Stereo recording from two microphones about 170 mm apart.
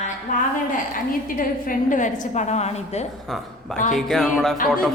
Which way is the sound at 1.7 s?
50° left (ahead or behind).